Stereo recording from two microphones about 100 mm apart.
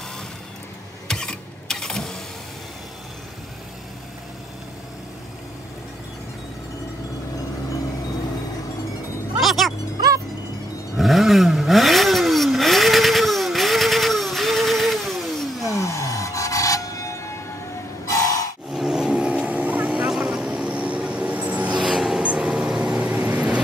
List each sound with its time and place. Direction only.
1.0 s printer: 5° left (ahead or behind)
9.4 s music: centre (ahead or behind)
9.9 s music: 35° right (ahead or behind)
11.0 s motorcycle: centre (ahead or behind)
15.6 s vehicle: 30° left (ahead or behind)
18.7 s vehicle: 5° right (ahead or behind)
21.8 s vehicle: 5° right (ahead or behind)